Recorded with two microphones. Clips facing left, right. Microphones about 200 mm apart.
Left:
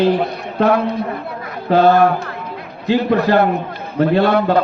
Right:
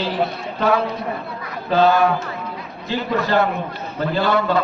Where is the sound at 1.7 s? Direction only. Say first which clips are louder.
Left 4 dB; 60° left (ahead or behind).